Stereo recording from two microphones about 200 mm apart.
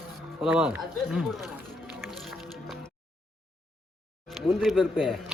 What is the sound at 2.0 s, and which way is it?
Music, centre (ahead or behind).